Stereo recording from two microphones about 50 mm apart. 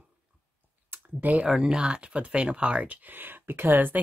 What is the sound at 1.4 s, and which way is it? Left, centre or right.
Speech, centre.